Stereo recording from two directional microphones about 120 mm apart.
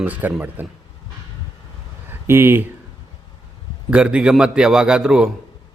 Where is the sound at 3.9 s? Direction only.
10° right (ahead or behind).